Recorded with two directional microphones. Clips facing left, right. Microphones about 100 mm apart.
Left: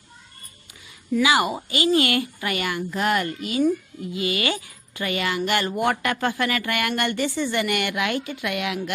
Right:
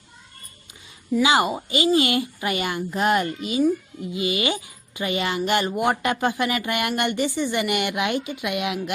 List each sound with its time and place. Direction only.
1.1 s speech: 25° right (ahead or behind)